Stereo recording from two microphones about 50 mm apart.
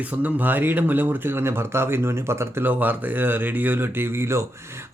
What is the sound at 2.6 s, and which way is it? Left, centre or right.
Speech, right.